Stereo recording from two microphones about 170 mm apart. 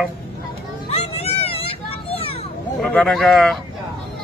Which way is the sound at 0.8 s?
35° left (ahead or behind).